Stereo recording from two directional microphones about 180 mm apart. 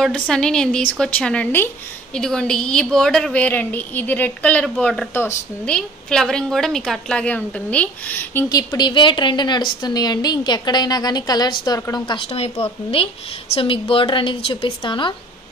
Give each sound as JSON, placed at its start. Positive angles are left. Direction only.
{"t": 0.0, "sound": "a woman's voice", "side_deg": 5}
{"t": 8.5, "sound": "a woman's voice", "side_deg": 20}